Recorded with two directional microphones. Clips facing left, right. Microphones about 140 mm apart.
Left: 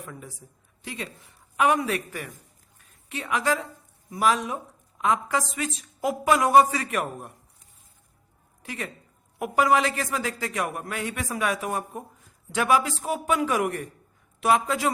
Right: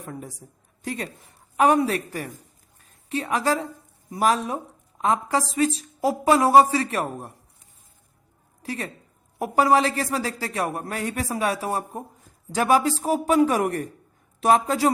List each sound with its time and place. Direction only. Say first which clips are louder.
0.0 s a woman's voice: right 4 dB; 40° right (ahead or behind)
8.6 s a woman's voice: right 4 dB; 35° right (ahead or behind)